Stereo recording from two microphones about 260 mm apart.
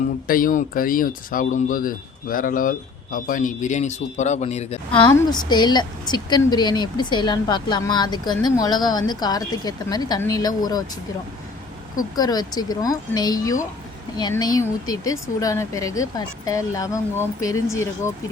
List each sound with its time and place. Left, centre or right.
0.3 s a woman's voice: left; by 10.8 s centre
12.1 s a woman's voice: centre